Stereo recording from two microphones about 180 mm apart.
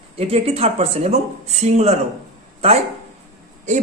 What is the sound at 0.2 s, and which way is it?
Speech, 35° right (ahead or behind).